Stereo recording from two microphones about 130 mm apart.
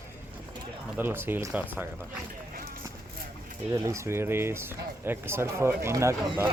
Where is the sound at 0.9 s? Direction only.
15° right (ahead or behind).